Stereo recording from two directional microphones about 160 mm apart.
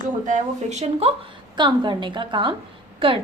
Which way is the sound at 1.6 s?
30° right (ahead or behind).